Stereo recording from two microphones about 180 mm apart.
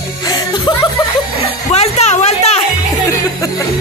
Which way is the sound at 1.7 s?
35° left (ahead or behind).